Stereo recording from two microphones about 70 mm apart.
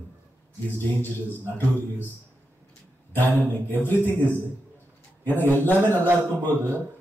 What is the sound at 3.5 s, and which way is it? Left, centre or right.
Speech, left.